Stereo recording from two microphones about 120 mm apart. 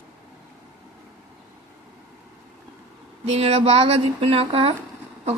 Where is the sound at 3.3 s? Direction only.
60° right (ahead or behind).